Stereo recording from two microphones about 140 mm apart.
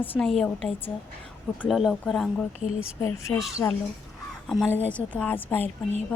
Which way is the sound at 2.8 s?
20° left (ahead or behind).